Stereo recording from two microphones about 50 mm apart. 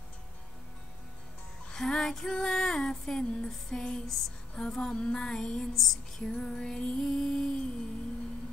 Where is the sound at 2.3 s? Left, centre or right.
Centre.